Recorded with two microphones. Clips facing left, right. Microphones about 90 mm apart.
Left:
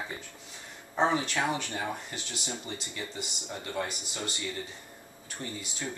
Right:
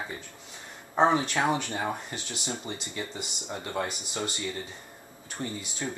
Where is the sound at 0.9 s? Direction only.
30° right (ahead or behind).